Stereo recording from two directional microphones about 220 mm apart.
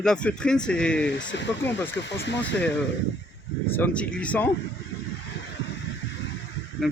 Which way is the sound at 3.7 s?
5° left (ahead or behind).